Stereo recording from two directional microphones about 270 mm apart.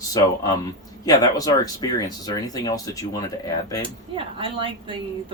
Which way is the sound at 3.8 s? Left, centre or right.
Centre.